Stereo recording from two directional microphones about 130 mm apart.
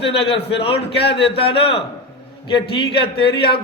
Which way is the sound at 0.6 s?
45° left (ahead or behind).